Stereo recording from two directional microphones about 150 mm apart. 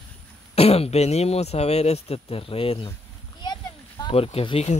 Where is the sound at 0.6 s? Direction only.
40° left (ahead or behind).